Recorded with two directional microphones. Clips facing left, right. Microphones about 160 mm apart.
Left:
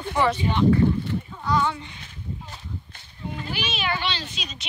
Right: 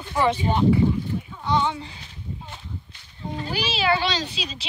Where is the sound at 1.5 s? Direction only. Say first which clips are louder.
Right 1 dB; 25° right (ahead or behind).